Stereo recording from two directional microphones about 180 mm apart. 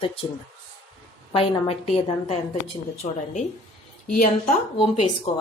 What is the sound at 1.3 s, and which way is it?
A woman's voice, 30° left (ahead or behind).